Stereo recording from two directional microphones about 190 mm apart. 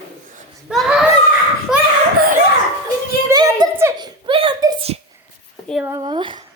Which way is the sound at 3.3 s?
20° right (ahead or behind).